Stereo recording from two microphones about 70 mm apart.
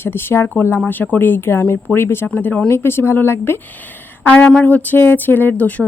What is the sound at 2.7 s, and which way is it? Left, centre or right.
Speech, left.